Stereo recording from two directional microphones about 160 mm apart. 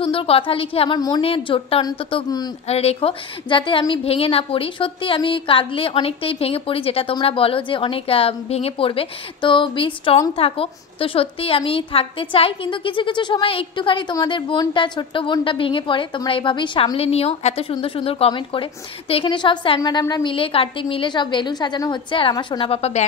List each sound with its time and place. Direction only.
0.0 s a woman's voice: 35° left (ahead or behind)
1.2 s a woman's voice: 35° left (ahead or behind)
2.7 s a woman's voice: 40° left (ahead or behind)